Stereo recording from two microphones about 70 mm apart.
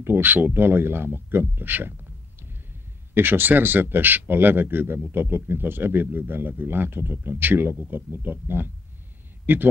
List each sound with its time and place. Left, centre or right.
0.0 s speech: right